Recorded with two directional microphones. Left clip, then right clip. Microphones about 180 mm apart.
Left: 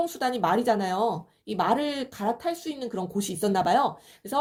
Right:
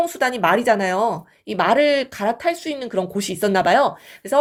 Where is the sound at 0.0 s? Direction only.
25° right (ahead or behind).